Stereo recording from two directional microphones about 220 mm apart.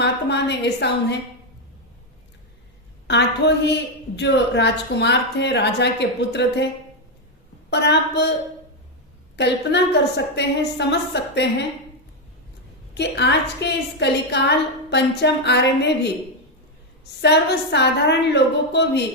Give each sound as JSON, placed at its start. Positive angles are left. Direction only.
{"t": 0.0, "sound": "a woman's voice", "side_deg": 50}
{"t": 3.1, "sound": "a woman's voice", "side_deg": 50}
{"t": 7.7, "sound": "a woman's voice", "side_deg": 50}
{"t": 9.3, "sound": "a woman's voice", "side_deg": 50}
{"t": 12.9, "sound": "a woman's voice", "side_deg": 50}
{"t": 17.2, "sound": "a woman's voice", "side_deg": 50}